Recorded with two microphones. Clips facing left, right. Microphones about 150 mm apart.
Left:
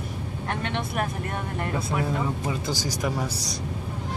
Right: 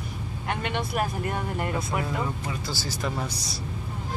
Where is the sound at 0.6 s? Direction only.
5° right (ahead or behind).